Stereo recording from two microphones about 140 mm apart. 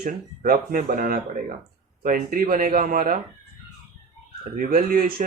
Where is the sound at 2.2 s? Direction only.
90° right.